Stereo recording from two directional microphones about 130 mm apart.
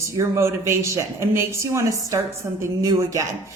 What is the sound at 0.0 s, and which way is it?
A woman's voice, 20° right (ahead or behind).